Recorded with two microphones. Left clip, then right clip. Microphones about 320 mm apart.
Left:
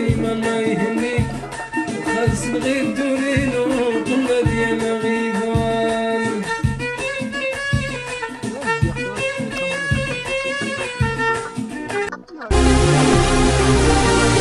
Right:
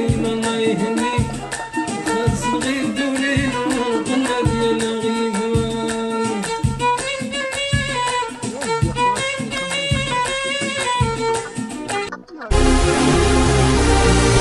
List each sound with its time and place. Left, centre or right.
12.5 s music: centre